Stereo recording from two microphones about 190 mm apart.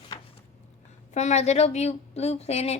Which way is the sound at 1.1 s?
35° left (ahead or behind).